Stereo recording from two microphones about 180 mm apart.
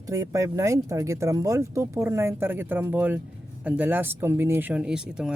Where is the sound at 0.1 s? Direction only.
20° right (ahead or behind).